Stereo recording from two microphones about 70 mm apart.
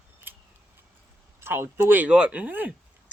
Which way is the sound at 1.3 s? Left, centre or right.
Right.